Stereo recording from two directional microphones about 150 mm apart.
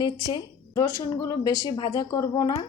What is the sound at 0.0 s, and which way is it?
A woman's voice, 30° left (ahead or behind).